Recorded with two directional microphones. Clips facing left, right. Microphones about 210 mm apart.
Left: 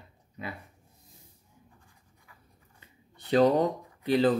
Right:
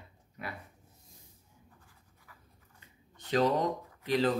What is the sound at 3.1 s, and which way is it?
Speech, 35° left (ahead or behind).